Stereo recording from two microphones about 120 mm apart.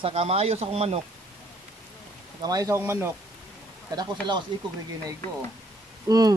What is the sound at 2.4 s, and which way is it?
Speech, 30° right (ahead or behind).